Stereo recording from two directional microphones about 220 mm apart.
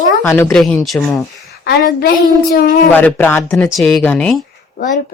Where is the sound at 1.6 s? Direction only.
40° left (ahead or behind).